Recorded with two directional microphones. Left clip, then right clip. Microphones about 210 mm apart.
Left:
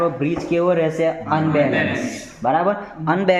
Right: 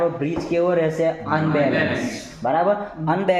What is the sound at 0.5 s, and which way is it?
Speech, 45° left (ahead or behind).